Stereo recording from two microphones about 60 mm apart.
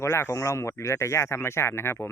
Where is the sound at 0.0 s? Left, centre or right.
Left.